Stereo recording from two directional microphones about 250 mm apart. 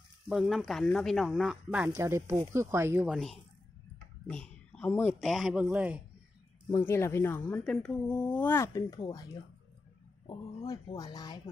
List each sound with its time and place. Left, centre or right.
0.3 s speech: centre
6.7 s speech: centre